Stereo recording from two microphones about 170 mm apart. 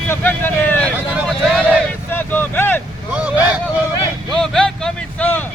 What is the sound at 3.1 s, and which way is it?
Vehicle, 10° right (ahead or behind).